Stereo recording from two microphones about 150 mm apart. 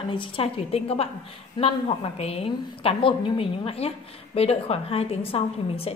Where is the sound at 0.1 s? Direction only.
35° left (ahead or behind).